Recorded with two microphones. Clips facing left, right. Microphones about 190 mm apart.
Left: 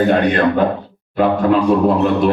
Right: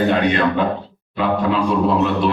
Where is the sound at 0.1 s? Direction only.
45° left (ahead or behind).